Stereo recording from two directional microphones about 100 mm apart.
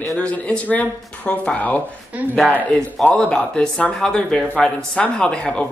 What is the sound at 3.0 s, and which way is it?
Speech, 15° left (ahead or behind).